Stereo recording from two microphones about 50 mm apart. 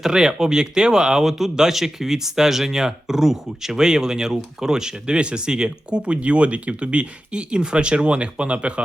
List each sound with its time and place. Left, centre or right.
0.0 s speech: centre